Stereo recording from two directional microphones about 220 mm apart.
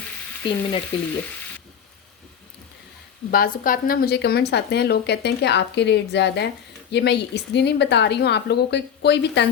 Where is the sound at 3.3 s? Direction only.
40° left (ahead or behind).